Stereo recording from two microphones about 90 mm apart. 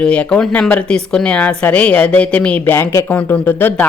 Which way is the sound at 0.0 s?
10° left (ahead or behind).